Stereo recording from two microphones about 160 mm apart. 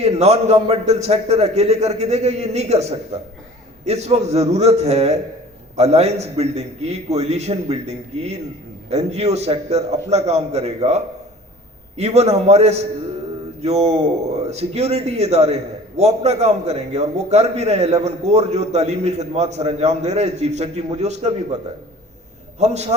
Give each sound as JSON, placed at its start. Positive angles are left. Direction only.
{"t": 0.0, "sound": "a man's voice", "side_deg": -40}